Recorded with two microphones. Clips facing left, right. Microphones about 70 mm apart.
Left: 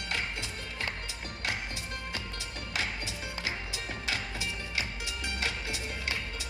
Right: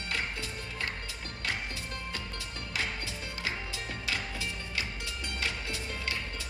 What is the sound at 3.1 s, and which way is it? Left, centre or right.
Music, centre.